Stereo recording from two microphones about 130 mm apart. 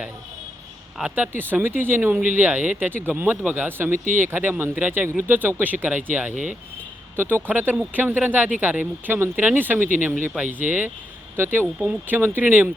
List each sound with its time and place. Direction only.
0.9 s speech: 10° right (ahead or behind)
3.9 s speech: 90° right
4.2 s speech: 15° right (ahead or behind)